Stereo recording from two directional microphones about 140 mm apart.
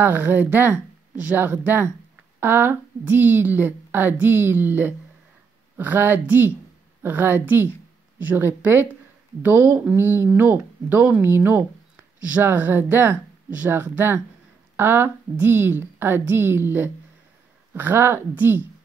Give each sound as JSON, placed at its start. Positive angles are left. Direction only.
{"t": 0.0, "sound": "speech", "side_deg": -15}